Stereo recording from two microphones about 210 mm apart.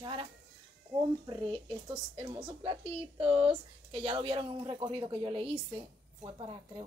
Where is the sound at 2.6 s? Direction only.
25° right (ahead or behind).